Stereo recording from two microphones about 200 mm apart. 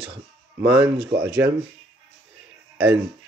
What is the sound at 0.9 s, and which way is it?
Speech, 60° right (ahead or behind).